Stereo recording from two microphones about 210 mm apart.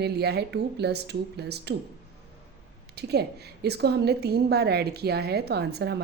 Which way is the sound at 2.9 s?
50° right (ahead or behind).